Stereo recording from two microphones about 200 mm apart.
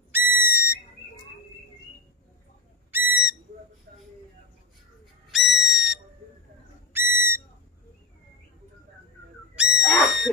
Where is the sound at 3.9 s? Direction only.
50° right (ahead or behind).